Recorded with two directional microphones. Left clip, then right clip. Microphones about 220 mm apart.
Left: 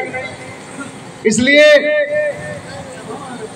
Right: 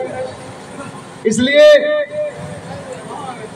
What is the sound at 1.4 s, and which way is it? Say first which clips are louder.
Speech: right 1 dB; 45° left (ahead or behind).